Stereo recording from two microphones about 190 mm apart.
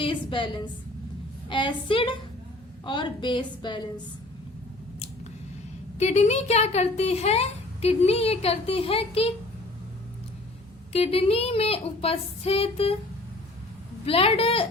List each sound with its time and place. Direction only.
0.0 s a woman's voice: 25° left (ahead or behind)
6.0 s a woman's voice: 35° left (ahead or behind)
10.9 s a woman's voice: 30° left (ahead or behind)
14.0 s a woman's voice: 30° left (ahead or behind)